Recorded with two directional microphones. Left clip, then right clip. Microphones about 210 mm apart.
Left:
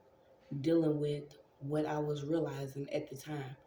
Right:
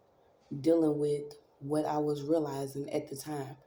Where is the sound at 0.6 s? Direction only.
45° right (ahead or behind).